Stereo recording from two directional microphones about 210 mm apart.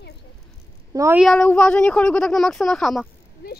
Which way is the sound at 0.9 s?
15° right (ahead or behind).